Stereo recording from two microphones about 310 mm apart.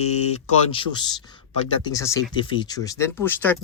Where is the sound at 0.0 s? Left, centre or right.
Centre.